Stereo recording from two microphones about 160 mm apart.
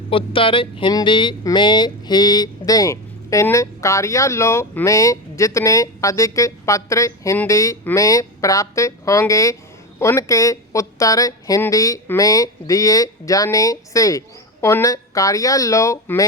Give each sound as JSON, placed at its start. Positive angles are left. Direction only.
{"t": 0.1, "sound": "speech", "side_deg": 35}